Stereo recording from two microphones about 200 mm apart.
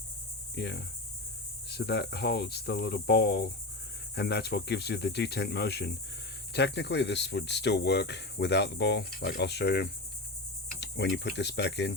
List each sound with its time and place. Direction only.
0.5 s speech: 55° left (ahead or behind)